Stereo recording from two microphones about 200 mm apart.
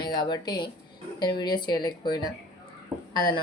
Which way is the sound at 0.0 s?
20° left (ahead or behind).